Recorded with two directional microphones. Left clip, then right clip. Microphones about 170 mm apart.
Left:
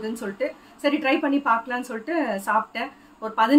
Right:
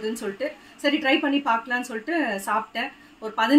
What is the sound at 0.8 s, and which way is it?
A woman's voice, 5° left (ahead or behind).